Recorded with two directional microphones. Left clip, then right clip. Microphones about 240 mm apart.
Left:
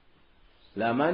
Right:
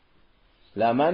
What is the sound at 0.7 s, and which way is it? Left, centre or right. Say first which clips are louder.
Speech: right 5 dB; right.